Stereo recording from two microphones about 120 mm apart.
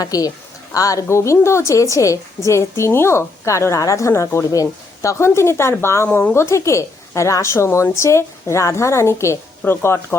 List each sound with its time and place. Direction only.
0.0 s a woman's voice: 30° left (ahead or behind)
6.1 s speech: 10° left (ahead or behind)
6.3 s a woman's voice: 25° left (ahead or behind)